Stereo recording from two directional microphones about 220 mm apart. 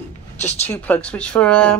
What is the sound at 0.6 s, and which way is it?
Speech, 5° left (ahead or behind).